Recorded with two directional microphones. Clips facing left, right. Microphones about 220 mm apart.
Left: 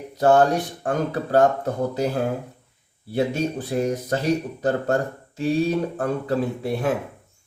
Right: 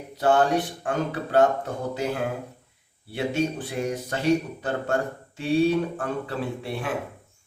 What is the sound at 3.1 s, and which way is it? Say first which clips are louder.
Speech: left 3 dB; 40° left (ahead or behind).